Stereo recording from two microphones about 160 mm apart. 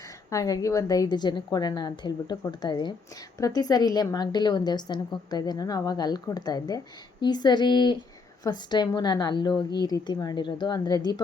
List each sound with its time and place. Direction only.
0.3 s a woman's voice: 20° left (ahead or behind)